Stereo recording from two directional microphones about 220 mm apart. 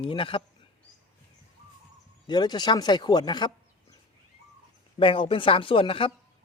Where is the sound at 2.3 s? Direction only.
20° left (ahead or behind).